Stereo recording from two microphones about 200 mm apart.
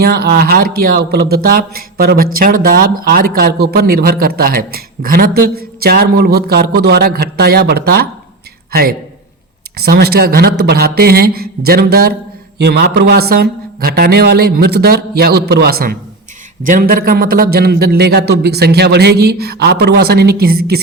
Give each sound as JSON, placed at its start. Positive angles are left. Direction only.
{"t": 0.0, "sound": "a man's voice", "side_deg": -50}